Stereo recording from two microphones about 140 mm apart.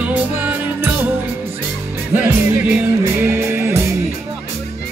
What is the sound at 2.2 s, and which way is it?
Music, 15° right (ahead or behind).